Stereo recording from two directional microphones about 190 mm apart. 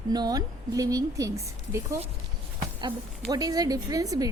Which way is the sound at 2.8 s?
20° right (ahead or behind).